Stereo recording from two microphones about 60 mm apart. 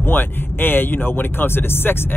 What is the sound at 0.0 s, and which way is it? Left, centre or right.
Speech, left.